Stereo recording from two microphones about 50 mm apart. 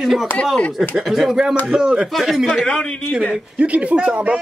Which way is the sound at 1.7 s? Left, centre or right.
Centre.